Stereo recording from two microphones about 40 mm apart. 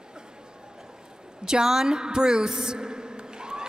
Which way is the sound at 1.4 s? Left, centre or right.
Centre.